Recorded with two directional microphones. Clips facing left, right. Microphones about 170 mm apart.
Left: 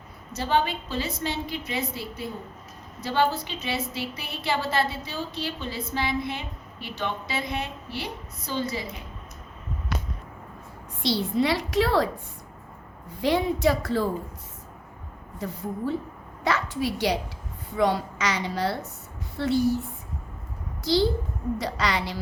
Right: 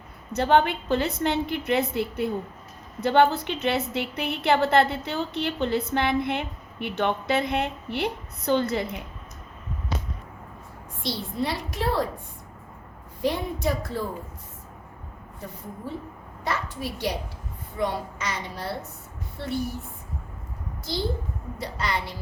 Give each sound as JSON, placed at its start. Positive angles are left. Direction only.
{"t": 0.3, "sound": "a woman's voice", "side_deg": -60}
{"t": 11.0, "sound": "a woman's voice", "side_deg": 90}
{"t": 13.2, "sound": "a woman's voice", "side_deg": 90}
{"t": 16.4, "sound": "a woman's voice", "side_deg": 85}
{"t": 20.8, "sound": "a child's voice", "side_deg": 90}